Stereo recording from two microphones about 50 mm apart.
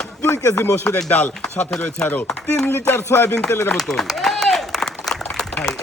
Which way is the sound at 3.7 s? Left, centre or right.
Centre.